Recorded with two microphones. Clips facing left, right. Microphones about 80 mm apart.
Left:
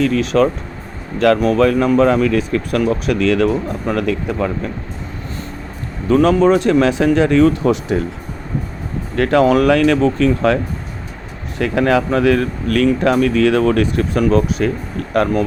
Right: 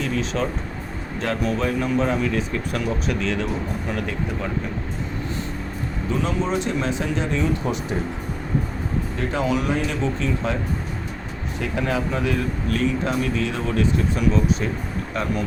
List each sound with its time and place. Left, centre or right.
0.0 s speech: left
6.1 s speech: left
9.1 s speech: left